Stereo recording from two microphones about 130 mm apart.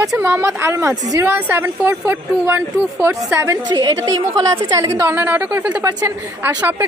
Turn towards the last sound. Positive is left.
turn(degrees=-15)  # may be behind; listen again after turning